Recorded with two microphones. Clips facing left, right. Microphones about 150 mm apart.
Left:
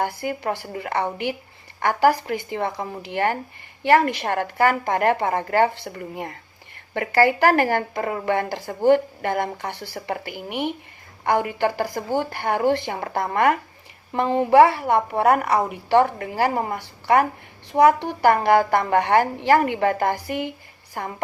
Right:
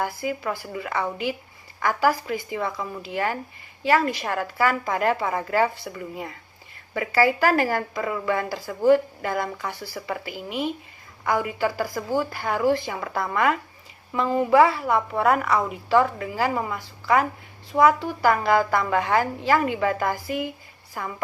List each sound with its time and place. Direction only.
0.2 s a woman's voice: 55° left (ahead or behind)
5.9 s a woman's voice: 50° left (ahead or behind)
13.0 s speech: 45° left (ahead or behind)
18.0 s a woman's voice: 65° left (ahead or behind)
18.7 s a woman's voice: 50° left (ahead or behind)
20.2 s a woman's voice: 65° left (ahead or behind)
20.9 s speech: 45° left (ahead or behind)